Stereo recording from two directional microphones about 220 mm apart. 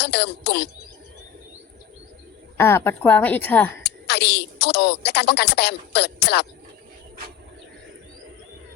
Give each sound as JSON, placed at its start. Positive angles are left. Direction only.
{"t": 0.0, "sound": "speech", "side_deg": 50}
{"t": 2.6, "sound": "a woman's voice", "side_deg": 10}
{"t": 3.8, "sound": "speech", "side_deg": 50}